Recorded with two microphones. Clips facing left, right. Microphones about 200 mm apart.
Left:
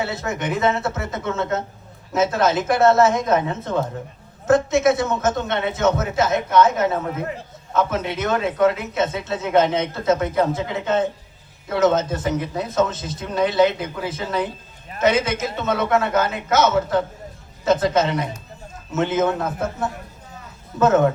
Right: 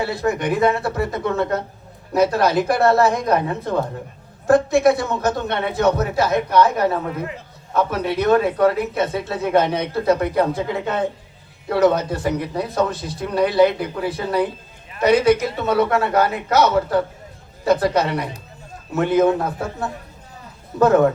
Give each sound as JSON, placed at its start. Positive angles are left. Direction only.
{"t": 0.0, "sound": "speech", "side_deg": 20}